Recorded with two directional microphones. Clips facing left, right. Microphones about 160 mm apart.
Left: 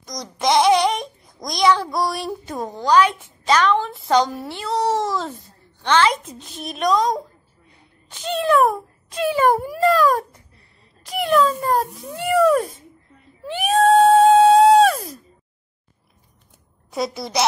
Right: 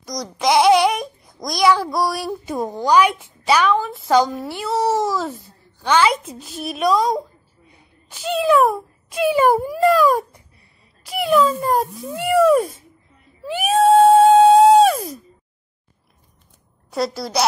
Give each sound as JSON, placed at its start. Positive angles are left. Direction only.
{"t": 0.0, "sound": "a child's voice", "side_deg": 0}
{"t": 9.6, "sound": "a child's voice", "side_deg": 0}
{"t": 9.8, "sound": "cat", "side_deg": -10}
{"t": 11.1, "sound": "a child's voice", "side_deg": -5}
{"t": 12.4, "sound": "cat", "side_deg": -10}
{"t": 16.9, "sound": "a child's voice", "side_deg": 0}